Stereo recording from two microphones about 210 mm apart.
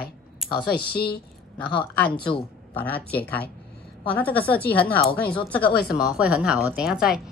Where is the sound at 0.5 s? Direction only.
50° left (ahead or behind).